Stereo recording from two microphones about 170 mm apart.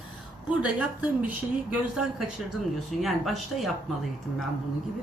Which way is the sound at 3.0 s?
Centre (ahead or behind).